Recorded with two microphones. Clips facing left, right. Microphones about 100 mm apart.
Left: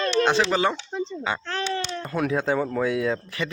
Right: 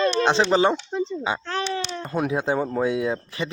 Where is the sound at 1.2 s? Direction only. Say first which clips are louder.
Right 2 dB; 15° right (ahead or behind).